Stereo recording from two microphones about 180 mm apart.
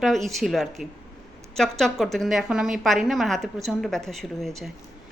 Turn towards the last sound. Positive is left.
turn(degrees=0)  # may be behind; listen again after turning